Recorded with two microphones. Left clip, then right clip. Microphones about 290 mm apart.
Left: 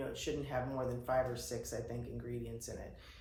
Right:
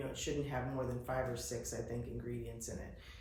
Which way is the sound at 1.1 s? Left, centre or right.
Centre.